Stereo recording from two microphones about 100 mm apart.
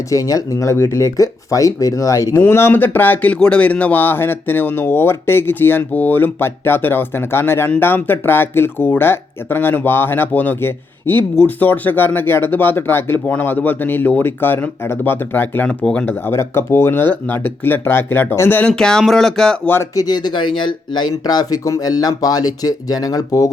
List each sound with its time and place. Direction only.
0.1 s speech: 35° left (ahead or behind); by 16.1 s 10° left (ahead or behind)
16.2 s speech: 25° left (ahead or behind)
18.7 s speech: 5° left (ahead or behind)
19.6 s speech: 20° left (ahead or behind)
20.0 s speech: 45° left (ahead or behind)